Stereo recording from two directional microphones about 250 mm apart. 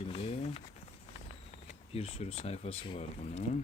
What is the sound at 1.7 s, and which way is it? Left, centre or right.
Speech, left.